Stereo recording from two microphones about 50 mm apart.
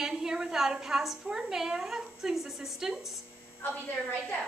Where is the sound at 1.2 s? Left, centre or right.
Centre.